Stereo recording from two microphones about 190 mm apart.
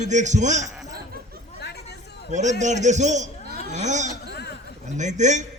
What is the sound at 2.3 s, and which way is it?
A man's voice, 40° right (ahead or behind).